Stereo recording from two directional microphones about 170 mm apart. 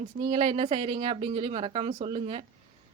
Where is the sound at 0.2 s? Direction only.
40° right (ahead or behind).